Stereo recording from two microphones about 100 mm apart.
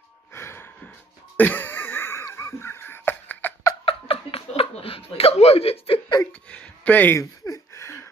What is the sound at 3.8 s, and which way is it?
Chuckle, 70° left (ahead or behind).